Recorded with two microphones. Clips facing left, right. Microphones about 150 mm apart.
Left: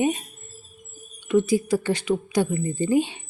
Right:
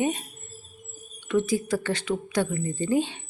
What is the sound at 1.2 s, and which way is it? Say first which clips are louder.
A woman's voice: left 4 dB; 10° left (ahead or behind).